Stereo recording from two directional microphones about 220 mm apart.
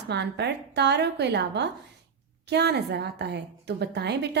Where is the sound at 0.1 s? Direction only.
50° right (ahead or behind).